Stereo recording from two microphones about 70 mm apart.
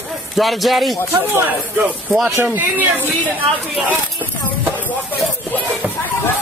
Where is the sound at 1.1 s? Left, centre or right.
Right.